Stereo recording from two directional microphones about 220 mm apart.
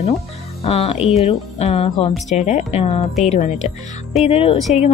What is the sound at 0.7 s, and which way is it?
A woman's voice, 25° left (ahead or behind).